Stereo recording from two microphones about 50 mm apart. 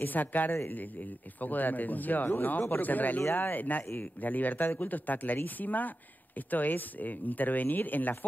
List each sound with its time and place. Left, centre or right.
0.0 s speech: left